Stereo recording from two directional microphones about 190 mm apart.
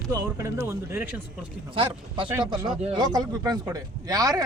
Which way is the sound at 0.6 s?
15° right (ahead or behind).